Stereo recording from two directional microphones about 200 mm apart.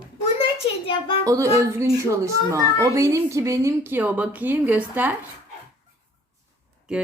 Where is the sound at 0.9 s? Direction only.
25° left (ahead or behind).